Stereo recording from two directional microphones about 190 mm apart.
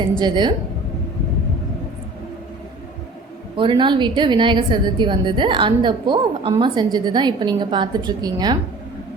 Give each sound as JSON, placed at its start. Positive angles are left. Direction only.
{"t": 0.0, "sound": "a woman's voice", "side_deg": -25}
{"t": 3.5, "sound": "a woman's voice", "side_deg": -25}